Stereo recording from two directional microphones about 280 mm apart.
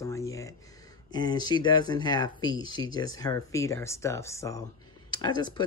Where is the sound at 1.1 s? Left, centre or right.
Centre.